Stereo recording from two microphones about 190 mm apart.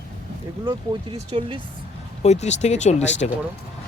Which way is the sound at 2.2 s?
35° left (ahead or behind).